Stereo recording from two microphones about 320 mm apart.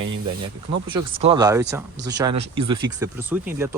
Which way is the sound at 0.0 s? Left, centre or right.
Centre.